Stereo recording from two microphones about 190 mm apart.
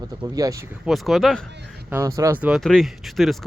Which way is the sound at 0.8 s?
Centre (ahead or behind).